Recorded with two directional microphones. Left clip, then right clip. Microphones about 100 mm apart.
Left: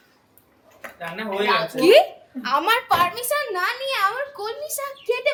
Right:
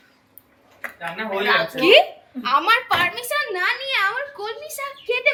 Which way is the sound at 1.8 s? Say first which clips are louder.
Even; 40° left (ahead or behind).